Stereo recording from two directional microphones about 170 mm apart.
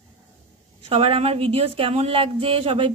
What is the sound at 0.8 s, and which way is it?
Speech, 35° right (ahead or behind).